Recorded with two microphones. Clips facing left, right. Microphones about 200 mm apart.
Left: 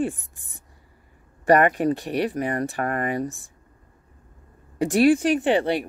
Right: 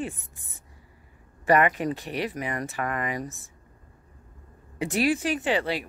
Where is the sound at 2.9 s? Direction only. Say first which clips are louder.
Left 4 dB; 55° left (ahead or behind).